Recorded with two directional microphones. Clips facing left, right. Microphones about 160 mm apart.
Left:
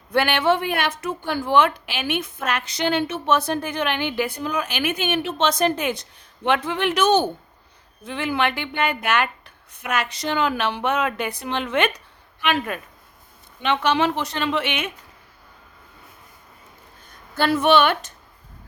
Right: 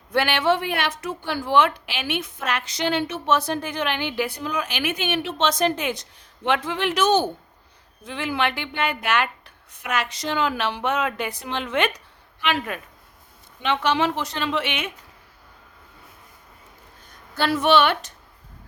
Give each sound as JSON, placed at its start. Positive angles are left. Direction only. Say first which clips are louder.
{"t": 0.1, "sound": "a woman's voice", "louder": "left 1 dB", "side_deg": 50}
{"t": 13.6, "sound": "speech", "louder": "left 1 dB", "side_deg": 60}
{"t": 17.4, "sound": "a woman's voice", "louder": "left 1 dB", "side_deg": 50}